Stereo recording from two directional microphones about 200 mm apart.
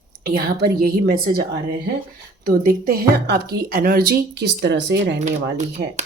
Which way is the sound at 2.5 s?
45° right (ahead or behind).